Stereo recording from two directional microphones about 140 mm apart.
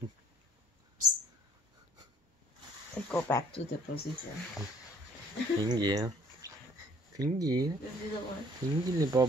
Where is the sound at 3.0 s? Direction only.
15° left (ahead or behind).